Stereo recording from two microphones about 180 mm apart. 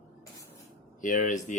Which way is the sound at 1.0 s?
45° left (ahead or behind).